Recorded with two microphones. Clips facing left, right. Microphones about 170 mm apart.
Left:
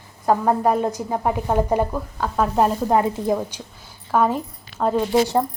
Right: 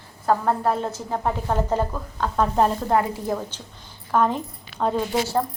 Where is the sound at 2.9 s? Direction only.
20° left (ahead or behind); by 5.0 s 5° left (ahead or behind).